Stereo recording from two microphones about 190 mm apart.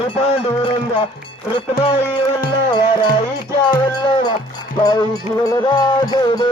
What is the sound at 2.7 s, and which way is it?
Music, 25° left (ahead or behind).